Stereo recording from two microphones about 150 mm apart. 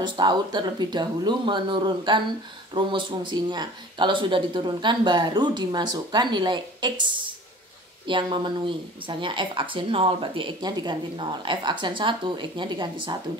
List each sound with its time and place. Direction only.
0.0 s speech: 30° right (ahead or behind)